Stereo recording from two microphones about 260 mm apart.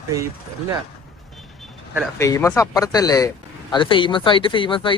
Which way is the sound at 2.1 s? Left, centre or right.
Centre.